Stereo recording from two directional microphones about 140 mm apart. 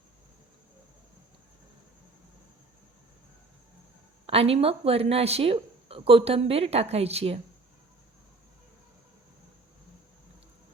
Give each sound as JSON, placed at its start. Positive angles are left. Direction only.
{"t": 4.3, "sound": "speech", "side_deg": -45}